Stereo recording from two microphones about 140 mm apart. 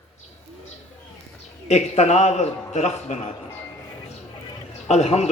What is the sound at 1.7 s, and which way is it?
A man's voice, 50° left (ahead or behind).